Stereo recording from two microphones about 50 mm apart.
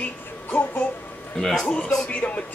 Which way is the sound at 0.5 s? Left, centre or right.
Left.